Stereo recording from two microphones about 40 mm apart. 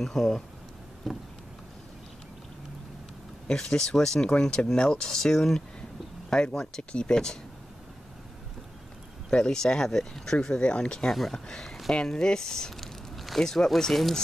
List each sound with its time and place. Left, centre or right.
0.0 s speech: centre
3.4 s speech: centre
9.3 s speech: centre
10.5 s speech: left
11.1 s speech: centre
11.3 s speech: centre
12.8 s a sound: centre
13.4 s speech: centre